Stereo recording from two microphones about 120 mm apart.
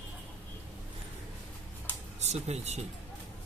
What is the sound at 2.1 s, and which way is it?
Speech, 65° right (ahead or behind).